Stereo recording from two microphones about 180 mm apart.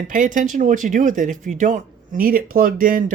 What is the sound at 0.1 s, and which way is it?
Speech, 45° right (ahead or behind).